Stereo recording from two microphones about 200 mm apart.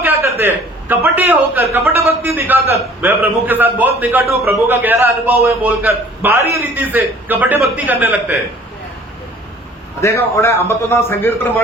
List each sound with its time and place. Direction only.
0.0 s a man's voice: 10° right (ahead or behind)
10.0 s a man's voice: 15° left (ahead or behind)